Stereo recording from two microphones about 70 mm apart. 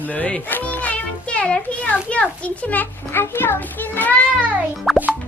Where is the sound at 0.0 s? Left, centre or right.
Left.